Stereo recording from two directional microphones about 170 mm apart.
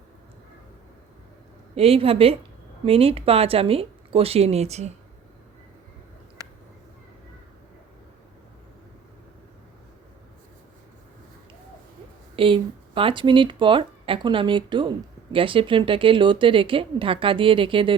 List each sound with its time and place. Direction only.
1.7 s speech: 35° right (ahead or behind)
12.4 s speech: 30° right (ahead or behind)